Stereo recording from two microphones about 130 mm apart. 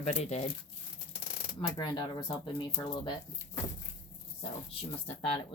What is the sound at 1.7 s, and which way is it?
Speech, 35° left (ahead or behind).